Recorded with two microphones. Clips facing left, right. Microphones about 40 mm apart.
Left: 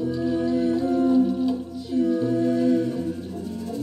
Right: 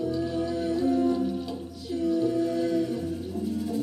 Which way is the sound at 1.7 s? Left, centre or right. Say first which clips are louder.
Even; left.